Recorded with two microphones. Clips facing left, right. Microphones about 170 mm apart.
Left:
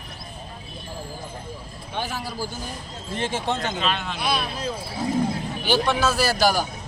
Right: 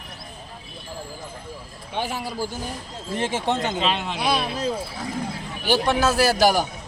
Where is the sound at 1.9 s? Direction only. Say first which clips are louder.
Right 2 dB; 25° right (ahead or behind).